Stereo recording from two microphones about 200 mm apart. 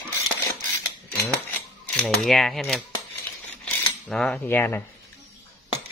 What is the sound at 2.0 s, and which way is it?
Mechanisms, centre (ahead or behind).